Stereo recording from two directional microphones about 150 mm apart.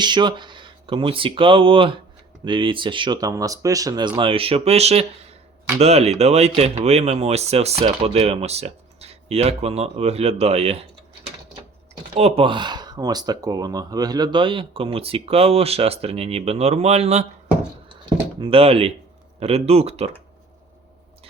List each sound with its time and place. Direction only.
0.0 s speech: 30° right (ahead or behind)
4.2 s speech: 40° right (ahead or behind)
12.1 s speech: 40° right (ahead or behind)
18.3 s speech: 40° right (ahead or behind)